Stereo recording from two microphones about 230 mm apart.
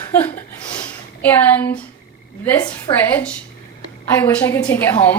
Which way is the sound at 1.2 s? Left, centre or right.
Centre.